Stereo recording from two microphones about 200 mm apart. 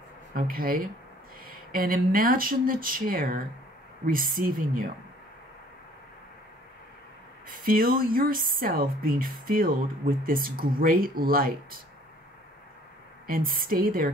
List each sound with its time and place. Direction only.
0.3 s speech: 45° right (ahead or behind)
7.4 s speech: 45° right (ahead or behind)
13.3 s speech: 45° right (ahead or behind)